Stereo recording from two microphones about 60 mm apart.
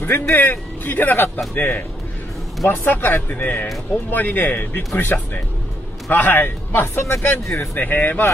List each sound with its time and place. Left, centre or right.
0.4 s speech: left
7.7 s speech: left